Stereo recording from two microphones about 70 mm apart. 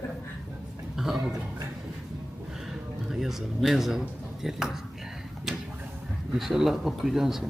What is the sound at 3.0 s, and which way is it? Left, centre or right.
Speech, centre.